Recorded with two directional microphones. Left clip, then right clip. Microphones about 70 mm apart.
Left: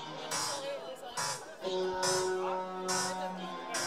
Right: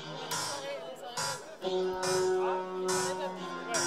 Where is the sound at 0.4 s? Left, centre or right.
Centre.